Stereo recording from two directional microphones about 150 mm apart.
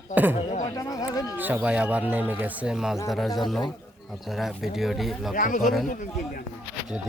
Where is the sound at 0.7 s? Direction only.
25° left (ahead or behind).